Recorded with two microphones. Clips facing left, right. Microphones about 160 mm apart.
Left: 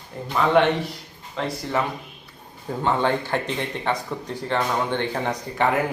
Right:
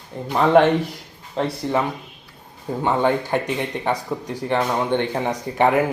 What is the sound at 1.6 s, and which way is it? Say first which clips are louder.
A man's voice: right 3 dB; 20° right (ahead or behind).